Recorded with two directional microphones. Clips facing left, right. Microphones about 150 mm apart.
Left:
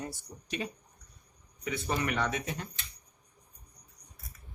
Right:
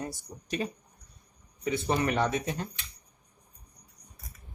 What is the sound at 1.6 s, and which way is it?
A man's voice, 30° right (ahead or behind).